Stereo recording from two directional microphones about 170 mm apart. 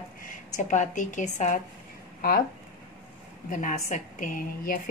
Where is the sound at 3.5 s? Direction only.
45° left (ahead or behind).